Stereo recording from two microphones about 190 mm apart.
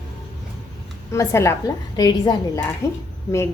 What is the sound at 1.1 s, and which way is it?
A woman's voice, 15° left (ahead or behind).